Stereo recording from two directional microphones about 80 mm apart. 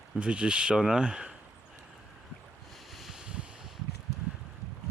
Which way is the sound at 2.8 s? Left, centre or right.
Centre.